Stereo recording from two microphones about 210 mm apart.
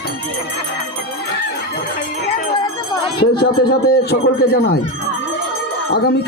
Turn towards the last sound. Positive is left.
turn(degrees=50)  # may be behind; listen again after turning